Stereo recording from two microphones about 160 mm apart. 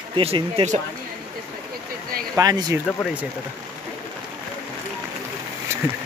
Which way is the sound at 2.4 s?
25° right (ahead or behind).